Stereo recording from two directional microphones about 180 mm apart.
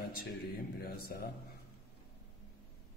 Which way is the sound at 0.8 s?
60° left (ahead or behind).